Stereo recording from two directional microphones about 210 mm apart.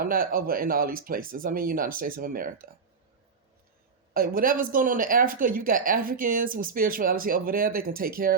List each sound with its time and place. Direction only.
0.0 s speech: 45° right (ahead or behind)
4.1 s speech: 45° right (ahead or behind)